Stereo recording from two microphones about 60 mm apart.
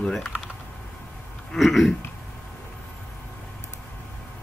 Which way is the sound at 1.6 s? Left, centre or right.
Centre.